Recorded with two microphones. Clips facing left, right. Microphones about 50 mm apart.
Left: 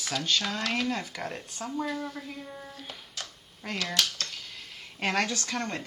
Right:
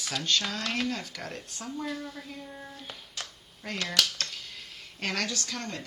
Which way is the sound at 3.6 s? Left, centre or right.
Centre.